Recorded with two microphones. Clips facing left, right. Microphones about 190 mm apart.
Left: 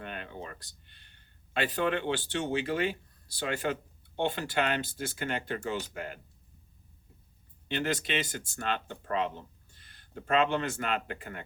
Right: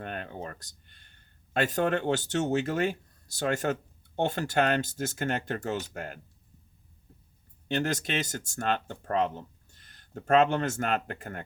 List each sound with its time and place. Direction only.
0.0 s speech: 45° right (ahead or behind)
7.7 s speech: 45° right (ahead or behind)